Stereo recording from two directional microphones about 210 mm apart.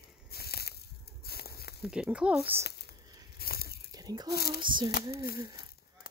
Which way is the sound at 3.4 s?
45° left (ahead or behind).